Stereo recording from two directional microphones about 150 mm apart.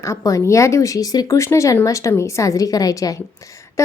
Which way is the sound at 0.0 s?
20° left (ahead or behind).